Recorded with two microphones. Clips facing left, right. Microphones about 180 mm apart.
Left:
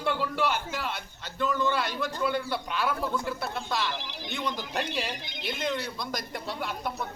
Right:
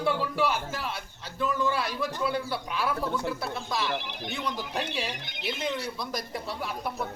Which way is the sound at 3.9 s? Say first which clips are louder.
Right 1 dB; 60° right (ahead or behind).